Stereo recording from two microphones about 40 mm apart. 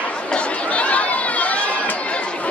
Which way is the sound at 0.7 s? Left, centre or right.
Left.